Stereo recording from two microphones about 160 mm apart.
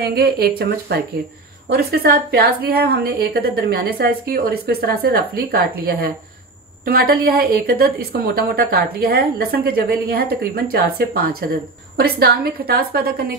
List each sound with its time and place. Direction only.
0.0 s a woman's voice: 75° right (ahead or behind)